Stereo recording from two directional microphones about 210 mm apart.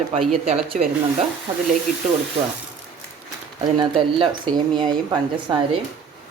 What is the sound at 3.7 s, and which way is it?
Speech, 20° right (ahead or behind).